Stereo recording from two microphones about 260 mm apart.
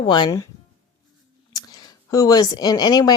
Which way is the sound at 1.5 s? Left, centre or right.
Centre.